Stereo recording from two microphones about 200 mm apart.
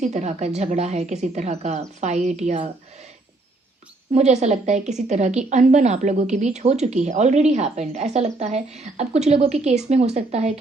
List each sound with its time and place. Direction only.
0.0 s a woman's voice: 35° right (ahead or behind)
4.1 s a woman's voice: 35° right (ahead or behind)